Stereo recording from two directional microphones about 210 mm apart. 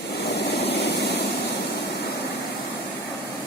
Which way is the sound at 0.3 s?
50° left (ahead or behind).